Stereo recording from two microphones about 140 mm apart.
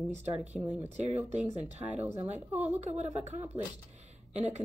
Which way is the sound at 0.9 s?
50° right (ahead or behind).